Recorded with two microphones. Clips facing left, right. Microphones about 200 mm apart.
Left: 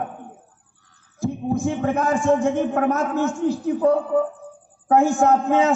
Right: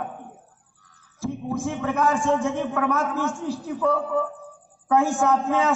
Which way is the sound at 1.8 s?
45° left (ahead or behind).